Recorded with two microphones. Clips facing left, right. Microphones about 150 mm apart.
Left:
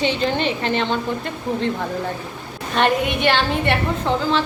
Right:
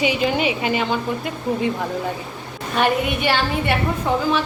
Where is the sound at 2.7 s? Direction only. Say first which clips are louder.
Left 1 dB; 5° right (ahead or behind).